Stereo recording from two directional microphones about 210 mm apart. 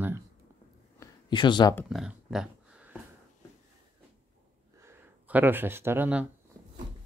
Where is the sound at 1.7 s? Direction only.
Centre (ahead or behind).